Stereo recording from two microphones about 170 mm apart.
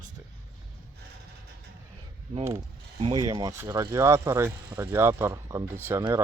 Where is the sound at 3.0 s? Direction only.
25° right (ahead or behind).